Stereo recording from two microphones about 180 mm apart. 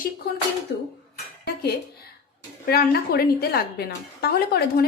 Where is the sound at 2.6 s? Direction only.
60° left (ahead or behind).